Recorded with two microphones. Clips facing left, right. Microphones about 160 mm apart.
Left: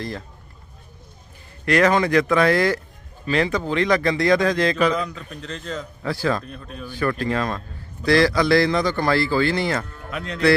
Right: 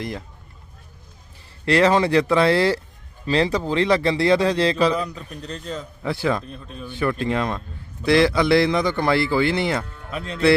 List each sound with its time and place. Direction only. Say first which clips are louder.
1.6 s a man's voice: right 1 dB; 30° right (ahead or behind)
6.1 s speech: even; 20° right (ahead or behind)
6.5 s speech: left 1 dB; centre (ahead or behind)
6.8 s speech: even; 20° right (ahead or behind)